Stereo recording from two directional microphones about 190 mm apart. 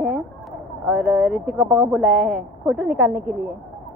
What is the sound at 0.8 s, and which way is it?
Speech, 5° right (ahead or behind).